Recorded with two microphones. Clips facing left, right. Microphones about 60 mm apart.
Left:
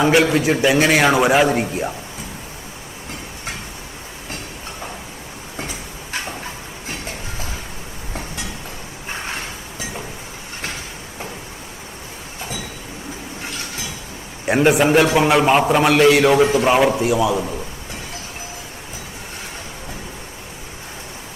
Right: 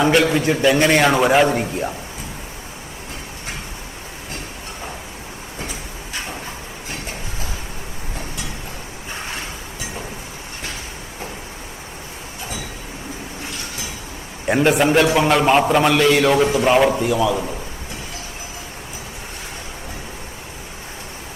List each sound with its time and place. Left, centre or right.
0.0 s a man's voice: centre
13.4 s a sound: left
14.4 s a man's voice: centre